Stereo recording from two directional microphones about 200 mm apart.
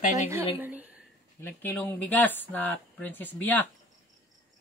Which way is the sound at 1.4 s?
10° left (ahead or behind).